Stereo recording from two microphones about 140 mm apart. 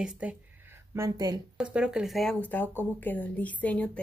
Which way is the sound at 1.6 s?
5° right (ahead or behind).